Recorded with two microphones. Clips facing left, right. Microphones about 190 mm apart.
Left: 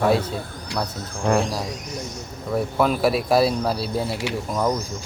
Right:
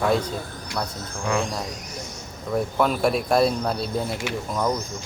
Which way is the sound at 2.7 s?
5° left (ahead or behind).